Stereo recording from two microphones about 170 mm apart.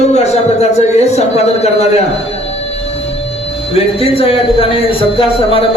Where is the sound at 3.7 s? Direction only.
35° left (ahead or behind).